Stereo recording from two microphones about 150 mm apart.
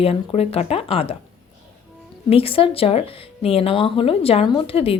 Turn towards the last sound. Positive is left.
turn(degrees=40)  # may be behind; listen again after turning